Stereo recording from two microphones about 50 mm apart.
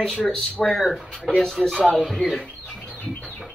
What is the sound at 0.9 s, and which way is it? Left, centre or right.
Speech, centre.